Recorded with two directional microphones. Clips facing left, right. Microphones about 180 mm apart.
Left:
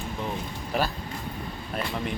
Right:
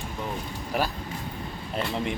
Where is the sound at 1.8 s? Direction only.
20° right (ahead or behind).